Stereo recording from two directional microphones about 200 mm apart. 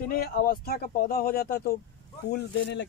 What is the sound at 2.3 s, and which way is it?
Speech, 60° left (ahead or behind).